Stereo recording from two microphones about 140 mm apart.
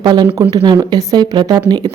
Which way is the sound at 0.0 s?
30° right (ahead or behind).